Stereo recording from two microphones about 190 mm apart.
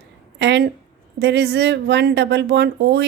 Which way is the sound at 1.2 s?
65° right (ahead or behind).